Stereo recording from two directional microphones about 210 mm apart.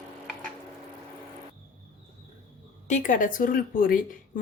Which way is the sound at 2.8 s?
35° left (ahead or behind).